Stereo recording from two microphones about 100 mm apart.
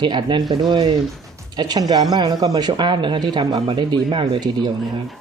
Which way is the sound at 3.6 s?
60° right (ahead or behind).